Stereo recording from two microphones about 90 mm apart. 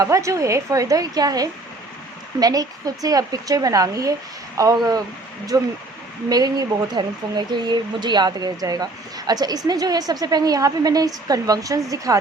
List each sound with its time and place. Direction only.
0.0 s a woman's voice: 35° right (ahead or behind)